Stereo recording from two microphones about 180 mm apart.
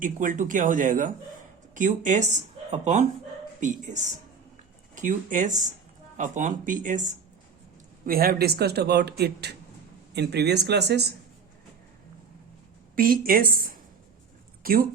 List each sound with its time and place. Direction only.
0.0 s speech: 45° right (ahead or behind)
8.0 s speech: 55° right (ahead or behind)
13.0 s speech: 55° right (ahead or behind)
14.6 s a sound: 55° right (ahead or behind)